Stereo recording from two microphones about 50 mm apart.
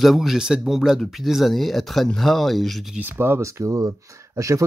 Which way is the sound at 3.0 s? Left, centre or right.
Right.